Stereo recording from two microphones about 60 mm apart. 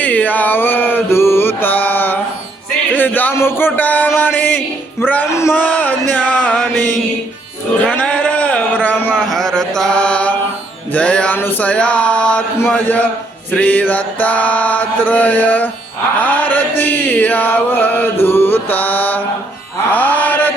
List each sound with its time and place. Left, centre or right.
0.0 s mantra: left
2.9 s a sound: left
3.3 s speech: left
3.8 s mantra: left
4.4 s music: left
5.3 s speech: left
5.5 s mantra: left
6.3 s mantra: centre
6.7 s mantra: centre
7.9 s a sound: left
9.1 s chant: centre
10.9 s mantra: centre
11.3 s music: left
11.6 s mantra: left